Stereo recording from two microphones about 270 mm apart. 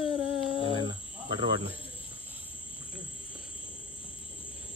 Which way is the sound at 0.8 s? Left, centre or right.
Centre.